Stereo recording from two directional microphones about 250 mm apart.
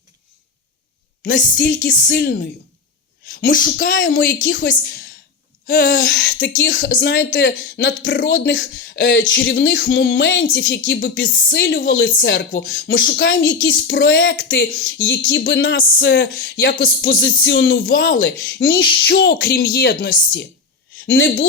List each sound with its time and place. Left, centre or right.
1.6 s speech: left
3.5 s speech: left
4.4 s speech: left
4.7 s a sound: left
5.6 s speech: left